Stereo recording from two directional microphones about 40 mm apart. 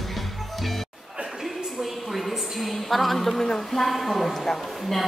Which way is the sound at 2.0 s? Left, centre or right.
Centre.